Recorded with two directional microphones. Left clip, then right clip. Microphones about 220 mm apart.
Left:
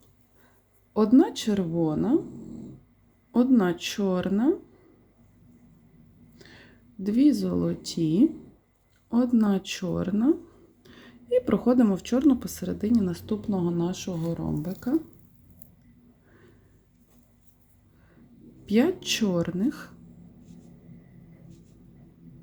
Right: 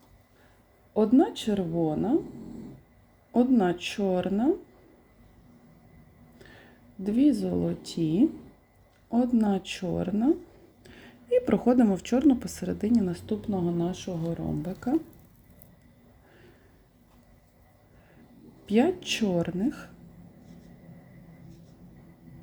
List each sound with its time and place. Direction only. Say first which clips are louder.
0.9 s speech: left 2 dB; 20° left (ahead or behind)
3.3 s speech: left 1 dB; 15° left (ahead or behind)
6.4 s speech: left 1 dB; 20° left (ahead or behind)
10.8 s speech: even; 5° left (ahead or behind)
18.6 s speech: left 1 dB; 15° left (ahead or behind)